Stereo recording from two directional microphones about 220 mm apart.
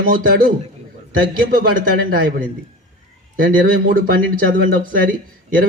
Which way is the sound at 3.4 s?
40° right (ahead or behind).